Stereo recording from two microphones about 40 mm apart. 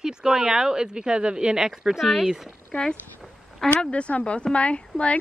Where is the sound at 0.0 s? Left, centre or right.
Centre.